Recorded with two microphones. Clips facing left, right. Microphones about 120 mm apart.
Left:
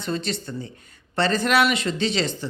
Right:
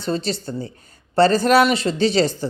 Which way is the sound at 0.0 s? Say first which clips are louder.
Right 4 dB; 35° right (ahead or behind).